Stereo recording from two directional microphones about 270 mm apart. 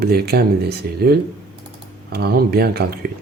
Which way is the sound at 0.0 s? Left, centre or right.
Right.